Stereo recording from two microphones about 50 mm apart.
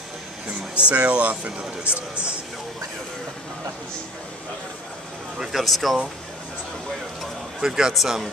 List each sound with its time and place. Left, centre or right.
0.7 s speech: right
5.4 s speech: centre
7.6 s speech: centre